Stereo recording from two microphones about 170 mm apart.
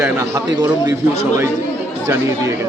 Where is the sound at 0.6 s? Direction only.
25° right (ahead or behind).